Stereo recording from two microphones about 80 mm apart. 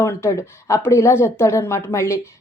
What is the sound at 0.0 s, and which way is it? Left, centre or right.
Speech, left.